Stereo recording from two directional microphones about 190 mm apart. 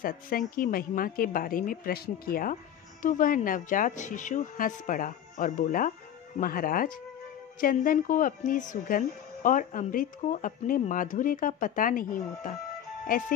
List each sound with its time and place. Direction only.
0.6 s a woman's voice: 50° left (ahead or behind)